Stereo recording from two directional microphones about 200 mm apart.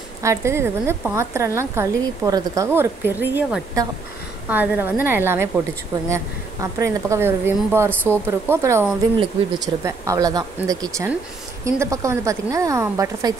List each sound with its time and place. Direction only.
0.2 s a woman's voice: 15° right (ahead or behind)